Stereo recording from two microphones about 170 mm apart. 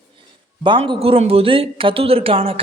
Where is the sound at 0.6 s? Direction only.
30° right (ahead or behind).